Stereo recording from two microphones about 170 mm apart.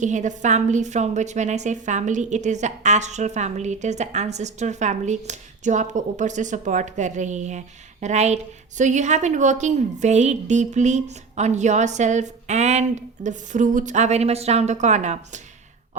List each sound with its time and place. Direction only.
0.0 s a woman's voice: 45° right (ahead or behind)